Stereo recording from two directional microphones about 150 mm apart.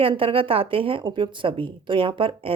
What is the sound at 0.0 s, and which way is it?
A woman's voice, 35° right (ahead or behind).